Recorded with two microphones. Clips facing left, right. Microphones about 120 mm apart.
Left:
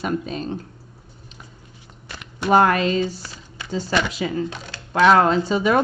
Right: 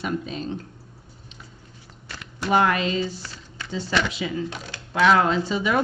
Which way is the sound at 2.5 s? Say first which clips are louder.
Left 4 dB; 45° left (ahead or behind).